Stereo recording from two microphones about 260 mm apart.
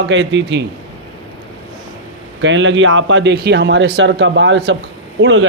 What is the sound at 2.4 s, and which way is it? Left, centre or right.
A man's voice, right.